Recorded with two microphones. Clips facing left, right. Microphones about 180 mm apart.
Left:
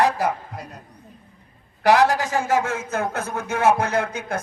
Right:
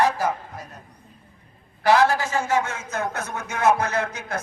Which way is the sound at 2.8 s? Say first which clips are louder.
Left 3 dB; 55° left (ahead or behind).